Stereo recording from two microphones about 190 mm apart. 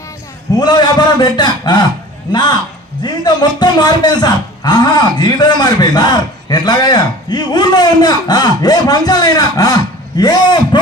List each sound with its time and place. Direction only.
0.6 s a man's voice: 20° left (ahead or behind)